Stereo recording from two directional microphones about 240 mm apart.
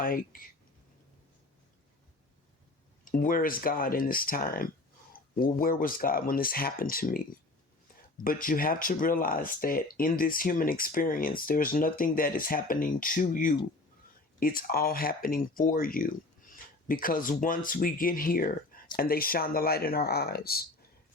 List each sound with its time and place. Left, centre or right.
0.0 s speech: left
3.0 s speech: left
8.2 s speech: left